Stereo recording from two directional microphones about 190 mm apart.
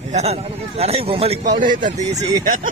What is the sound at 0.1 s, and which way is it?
A man's voice, 35° right (ahead or behind).